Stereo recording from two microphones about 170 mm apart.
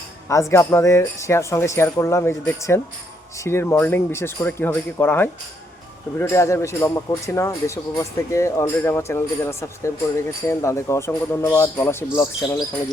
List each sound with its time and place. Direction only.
0.3 s a man's voice: 15° left (ahead or behind)